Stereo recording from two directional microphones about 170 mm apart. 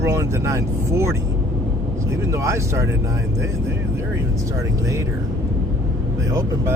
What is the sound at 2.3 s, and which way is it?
Speech, 15° right (ahead or behind).